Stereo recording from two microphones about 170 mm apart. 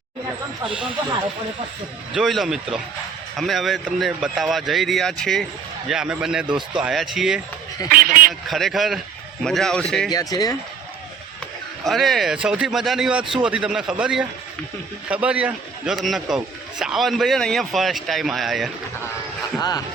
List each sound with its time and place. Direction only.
2.1 s a man's voice: centre (ahead or behind)
7.9 s a man's voice: 60° right (ahead or behind)
8.4 s a man's voice: centre (ahead or behind)
10.1 s speech: 20° left (ahead or behind)
11.9 s a man's voice: centre (ahead or behind)
19.5 s speech: 25° left (ahead or behind)